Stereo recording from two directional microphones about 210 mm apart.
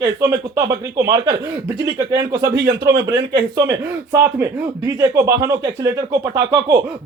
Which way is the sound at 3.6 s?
15° right (ahead or behind).